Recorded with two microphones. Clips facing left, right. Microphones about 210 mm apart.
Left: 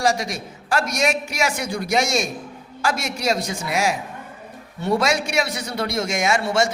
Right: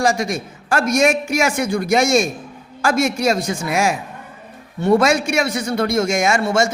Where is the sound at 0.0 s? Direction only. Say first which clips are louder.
Right 3 dB; 50° right (ahead or behind).